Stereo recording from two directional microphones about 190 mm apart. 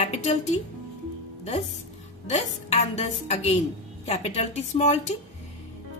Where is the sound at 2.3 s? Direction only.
35° left (ahead or behind).